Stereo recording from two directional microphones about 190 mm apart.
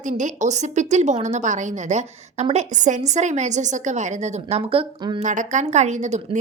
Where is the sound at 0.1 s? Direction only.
40° right (ahead or behind).